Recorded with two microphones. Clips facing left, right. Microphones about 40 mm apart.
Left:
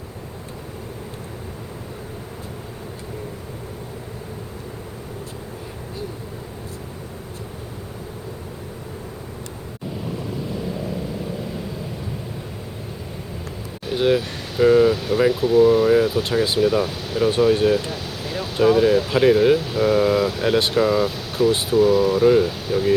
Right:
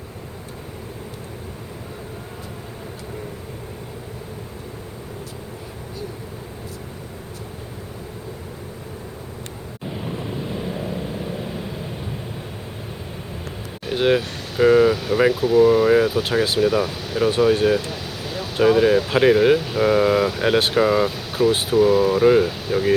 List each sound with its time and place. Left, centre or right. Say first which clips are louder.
10.0 s vehicle: even; right
13.8 s speech: even; centre
17.9 s a sound: left 1 dB; centre
18.6 s speech: even; centre